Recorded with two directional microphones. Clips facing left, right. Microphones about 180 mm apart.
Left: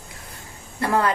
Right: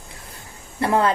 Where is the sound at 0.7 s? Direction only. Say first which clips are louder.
Right 2 dB; 25° right (ahead or behind).